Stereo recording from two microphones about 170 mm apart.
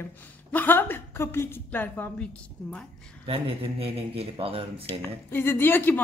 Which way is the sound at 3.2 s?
35° right (ahead or behind).